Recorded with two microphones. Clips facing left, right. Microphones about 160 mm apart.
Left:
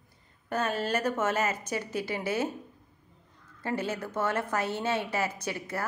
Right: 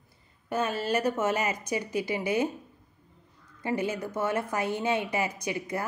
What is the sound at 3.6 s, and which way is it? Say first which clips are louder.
A woman's voice: right 2 dB; 15° right (ahead or behind).